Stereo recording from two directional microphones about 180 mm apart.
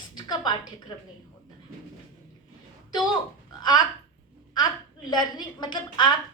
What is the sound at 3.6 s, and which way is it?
Speech, 20° left (ahead or behind).